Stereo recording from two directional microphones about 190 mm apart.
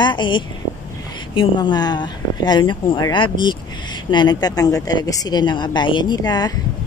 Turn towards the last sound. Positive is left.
turn(degrees=20)  # may be behind; listen again after turning